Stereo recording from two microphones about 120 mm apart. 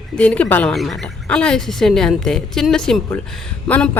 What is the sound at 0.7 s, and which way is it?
Speech, centre (ahead or behind).